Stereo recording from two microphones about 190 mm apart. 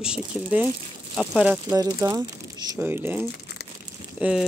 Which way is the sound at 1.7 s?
15° right (ahead or behind).